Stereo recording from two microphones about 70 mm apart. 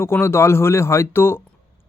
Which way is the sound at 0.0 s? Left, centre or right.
Left.